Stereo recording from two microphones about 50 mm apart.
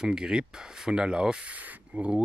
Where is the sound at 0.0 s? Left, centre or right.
Centre.